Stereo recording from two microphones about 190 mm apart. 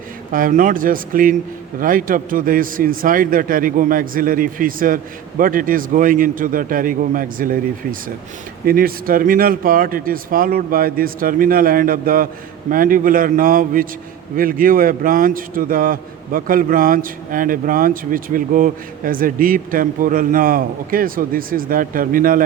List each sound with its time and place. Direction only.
0.3 s a man's voice: 45° right (ahead or behind)